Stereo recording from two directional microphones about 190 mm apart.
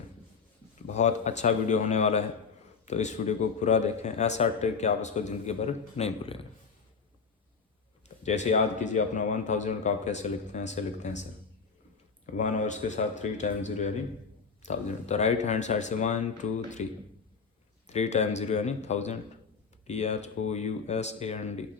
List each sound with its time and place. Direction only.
0.9 s speech: 35° left (ahead or behind)
8.0 s speech: 35° left (ahead or behind)
12.2 s speech: 40° left (ahead or behind)
17.8 s speech: 35° left (ahead or behind)